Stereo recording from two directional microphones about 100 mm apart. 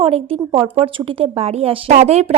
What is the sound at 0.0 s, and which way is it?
Speech, 65° right (ahead or behind).